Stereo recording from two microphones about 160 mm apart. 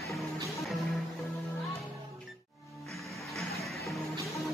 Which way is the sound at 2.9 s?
Centre (ahead or behind).